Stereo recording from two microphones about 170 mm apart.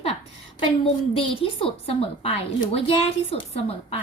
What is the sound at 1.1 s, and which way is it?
A woman's voice, 35° left (ahead or behind).